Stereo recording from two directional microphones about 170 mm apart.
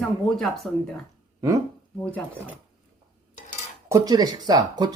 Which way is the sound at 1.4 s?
20° right (ahead or behind).